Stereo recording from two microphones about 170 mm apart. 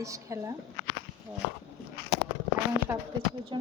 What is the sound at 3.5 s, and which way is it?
Speech, 30° right (ahead or behind).